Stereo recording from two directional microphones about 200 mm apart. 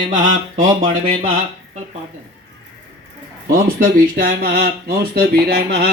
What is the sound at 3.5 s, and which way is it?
Speech, 45° right (ahead or behind).